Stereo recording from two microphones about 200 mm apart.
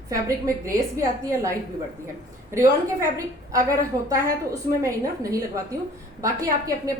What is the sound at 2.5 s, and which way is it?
A woman's voice, 15° right (ahead or behind).